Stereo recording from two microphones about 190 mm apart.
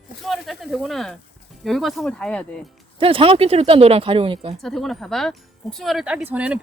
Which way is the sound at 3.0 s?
30° right (ahead or behind).